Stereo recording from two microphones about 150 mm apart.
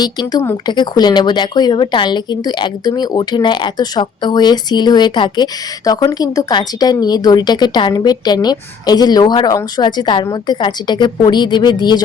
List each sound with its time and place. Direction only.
0.0 s speech: 25° left (ahead or behind)